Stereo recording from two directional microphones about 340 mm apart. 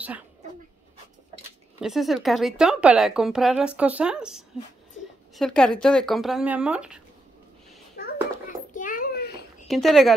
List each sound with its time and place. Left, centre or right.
1.8 s speech: centre
7.9 s a sound: left
9.7 s speech: centre